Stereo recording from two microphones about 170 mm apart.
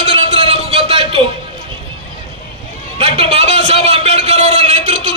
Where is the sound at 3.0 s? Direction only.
35° right (ahead or behind).